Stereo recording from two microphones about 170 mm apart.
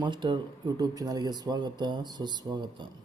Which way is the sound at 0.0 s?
25° right (ahead or behind).